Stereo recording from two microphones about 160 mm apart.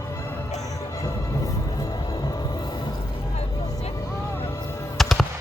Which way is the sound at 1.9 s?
25° left (ahead or behind).